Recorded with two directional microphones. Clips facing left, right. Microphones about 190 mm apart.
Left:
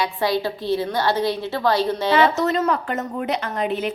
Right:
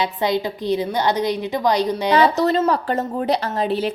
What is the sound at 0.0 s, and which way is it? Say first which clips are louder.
A woman's voice: right 1 dB; 20° right (ahead or behind).